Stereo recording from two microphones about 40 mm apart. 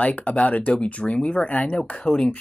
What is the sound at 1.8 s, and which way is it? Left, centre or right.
Speech, left.